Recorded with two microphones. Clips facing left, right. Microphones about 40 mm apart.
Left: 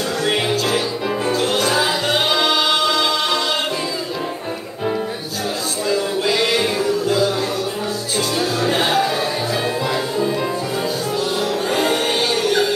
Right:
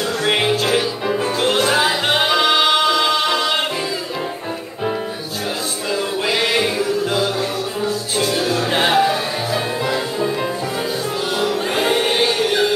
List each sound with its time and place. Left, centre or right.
0.2 s music: right
0.5 s music: centre
5.9 s a sound: right
6.6 s music: right
8.6 s music: right
11.4 s music: right